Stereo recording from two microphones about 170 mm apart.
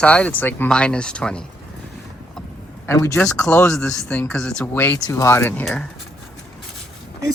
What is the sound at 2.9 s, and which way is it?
Speech, 15° left (ahead or behind).